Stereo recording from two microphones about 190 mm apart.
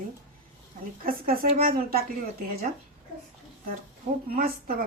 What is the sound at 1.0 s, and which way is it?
A woman's voice, 50° right (ahead or behind).